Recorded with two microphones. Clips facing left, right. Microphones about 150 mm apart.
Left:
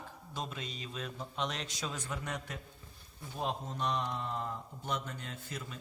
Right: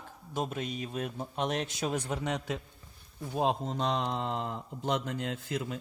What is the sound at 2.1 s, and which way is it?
Speech, 85° right.